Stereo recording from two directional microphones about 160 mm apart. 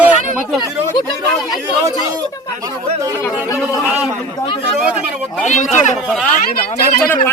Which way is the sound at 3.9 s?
10° right (ahead or behind).